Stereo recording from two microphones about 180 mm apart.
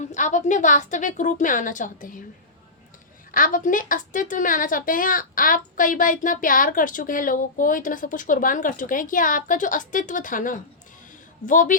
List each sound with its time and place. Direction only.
0.0 s a woman's voice: 40° left (ahead or behind)
3.3 s a woman's voice: 50° left (ahead or behind)